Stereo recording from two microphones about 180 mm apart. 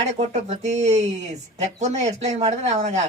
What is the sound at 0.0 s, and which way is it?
Speech, 40° right (ahead or behind).